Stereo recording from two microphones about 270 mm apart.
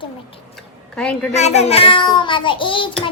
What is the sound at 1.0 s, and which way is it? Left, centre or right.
Speech, centre.